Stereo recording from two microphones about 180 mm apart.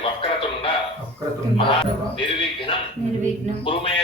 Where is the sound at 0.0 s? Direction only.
30° left (ahead or behind).